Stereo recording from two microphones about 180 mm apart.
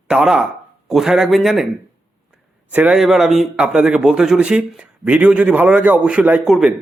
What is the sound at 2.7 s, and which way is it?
A man's voice, 5° right (ahead or behind).